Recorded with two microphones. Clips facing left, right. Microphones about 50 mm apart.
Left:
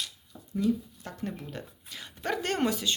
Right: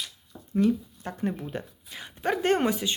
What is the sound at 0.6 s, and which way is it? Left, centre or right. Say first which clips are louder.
Speech: right 3 dB; right.